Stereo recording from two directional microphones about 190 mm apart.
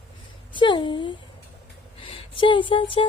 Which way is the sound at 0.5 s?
25° left (ahead or behind).